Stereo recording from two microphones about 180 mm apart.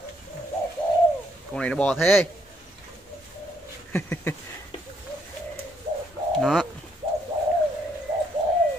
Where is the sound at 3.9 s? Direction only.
10° left (ahead or behind).